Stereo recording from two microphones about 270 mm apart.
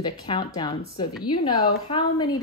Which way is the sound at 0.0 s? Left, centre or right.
Centre.